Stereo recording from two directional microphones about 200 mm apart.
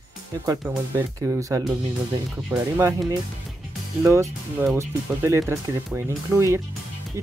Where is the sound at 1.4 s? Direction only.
15° right (ahead or behind).